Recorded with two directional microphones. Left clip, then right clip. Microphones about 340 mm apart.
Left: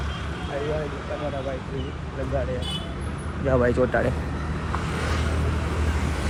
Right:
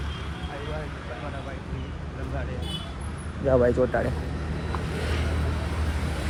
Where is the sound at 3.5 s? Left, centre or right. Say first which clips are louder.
Even; left.